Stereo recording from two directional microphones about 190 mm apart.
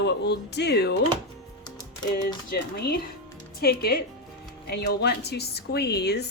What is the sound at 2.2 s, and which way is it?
Speech, 55° left (ahead or behind).